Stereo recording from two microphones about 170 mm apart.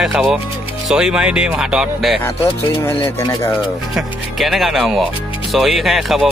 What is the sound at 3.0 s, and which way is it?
Speech, 20° left (ahead or behind).